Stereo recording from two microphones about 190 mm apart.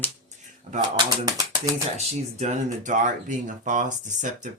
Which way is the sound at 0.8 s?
20° right (ahead or behind).